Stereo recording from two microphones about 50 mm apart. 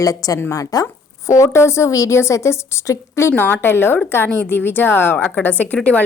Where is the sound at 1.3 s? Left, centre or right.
Left.